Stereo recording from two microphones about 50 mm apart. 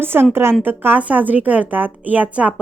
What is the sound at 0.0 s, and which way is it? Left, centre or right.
Speech, right.